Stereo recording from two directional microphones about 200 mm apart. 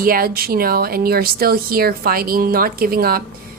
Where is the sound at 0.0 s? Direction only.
50° right (ahead or behind).